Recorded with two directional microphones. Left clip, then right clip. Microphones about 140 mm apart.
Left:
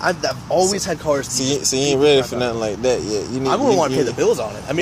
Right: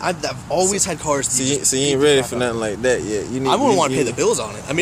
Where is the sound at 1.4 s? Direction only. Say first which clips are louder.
Even; 20° right (ahead or behind).